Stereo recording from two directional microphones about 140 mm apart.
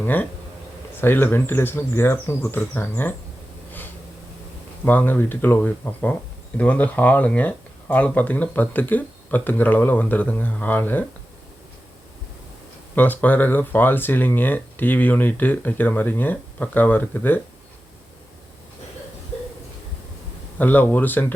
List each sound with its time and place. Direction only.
0.0 s speech: 15° left (ahead or behind)
4.9 s speech: 15° left (ahead or behind)
13.0 s speech: 10° left (ahead or behind)
20.6 s speech: 10° left (ahead or behind)